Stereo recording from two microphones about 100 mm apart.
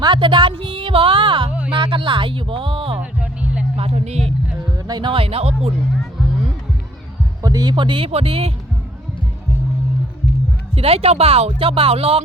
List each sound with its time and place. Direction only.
0.0 s a woman's voice: 50° right (ahead or behind)
1.5 s music: 15° right (ahead or behind)
1.7 s speech: 60° right (ahead or behind)
3.0 s music: 15° right (ahead or behind)
3.8 s speech: 90° right
4.9 s speech: 45° right (ahead or behind)
5.1 s speech: 75° right (ahead or behind)
7.4 s speech: 40° right (ahead or behind); by 8.5 s 75° right (ahead or behind)
10.8 s speech: 80° right